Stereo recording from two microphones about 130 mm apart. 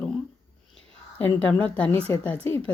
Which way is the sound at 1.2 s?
15° left (ahead or behind).